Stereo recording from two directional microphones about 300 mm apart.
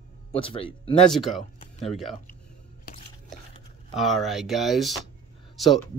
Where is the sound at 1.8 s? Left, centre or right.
Centre.